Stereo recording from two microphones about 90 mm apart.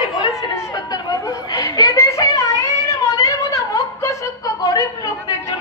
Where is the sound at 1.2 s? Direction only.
45° left (ahead or behind).